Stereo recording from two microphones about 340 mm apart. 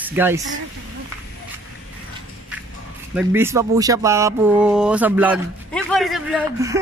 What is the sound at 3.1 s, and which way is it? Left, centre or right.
Speech, centre.